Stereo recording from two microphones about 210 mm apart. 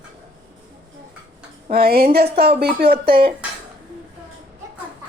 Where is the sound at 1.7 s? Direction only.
45° right (ahead or behind).